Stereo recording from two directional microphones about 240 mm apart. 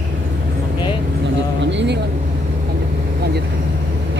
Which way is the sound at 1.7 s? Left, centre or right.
Right.